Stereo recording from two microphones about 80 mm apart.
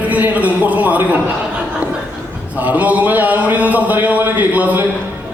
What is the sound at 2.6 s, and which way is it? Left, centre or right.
A man's voice, centre.